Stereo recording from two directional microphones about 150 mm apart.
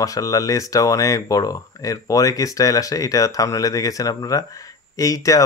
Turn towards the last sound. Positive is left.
turn(degrees=20)  # may be behind; listen again after turning